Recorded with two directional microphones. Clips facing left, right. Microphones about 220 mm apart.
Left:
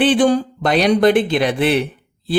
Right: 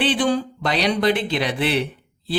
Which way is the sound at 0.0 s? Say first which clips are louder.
Left 6 dB; 50° left (ahead or behind).